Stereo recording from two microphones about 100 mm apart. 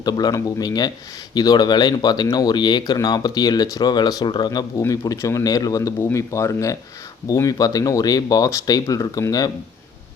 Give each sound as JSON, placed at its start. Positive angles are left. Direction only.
{"t": 0.0, "sound": "speech", "side_deg": 45}
{"t": 4.8, "sound": "speech", "side_deg": 30}